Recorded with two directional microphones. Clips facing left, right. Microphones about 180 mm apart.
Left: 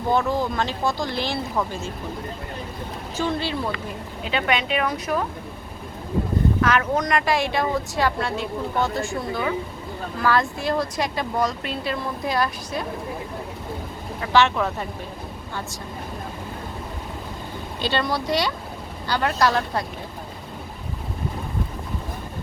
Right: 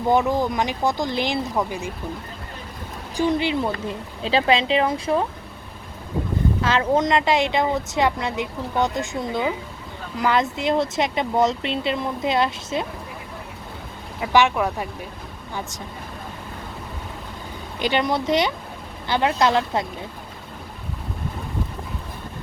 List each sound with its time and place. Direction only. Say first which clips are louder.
0.1 s speech: right 2 dB; 15° right (ahead or behind)
3.2 s speech: right 5 dB; 15° right (ahead or behind)
3.8 s speech: right 4 dB; 30° right (ahead or behind)
6.6 s speech: right 5 dB; 25° right (ahead or behind)
14.2 s speech: right 1 dB; 15° right (ahead or behind)
17.7 s speech: right 3 dB; 15° right (ahead or behind)